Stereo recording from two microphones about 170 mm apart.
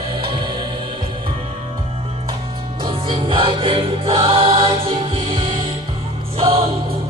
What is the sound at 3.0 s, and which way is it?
Music, 30° right (ahead or behind).